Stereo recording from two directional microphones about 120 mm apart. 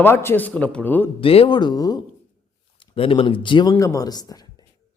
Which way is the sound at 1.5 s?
35° left (ahead or behind).